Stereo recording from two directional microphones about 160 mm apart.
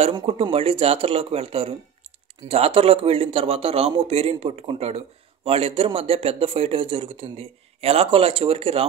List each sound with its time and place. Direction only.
0.3 s speech: 40° right (ahead or behind)